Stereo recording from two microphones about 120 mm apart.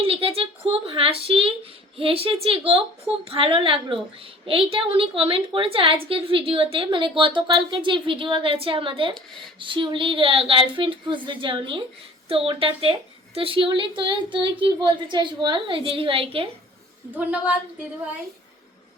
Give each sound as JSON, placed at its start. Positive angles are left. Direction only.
{"t": 0.0, "sound": "a woman's voice", "side_deg": -50}
{"t": 17.1, "sound": "a woman's voice", "side_deg": -15}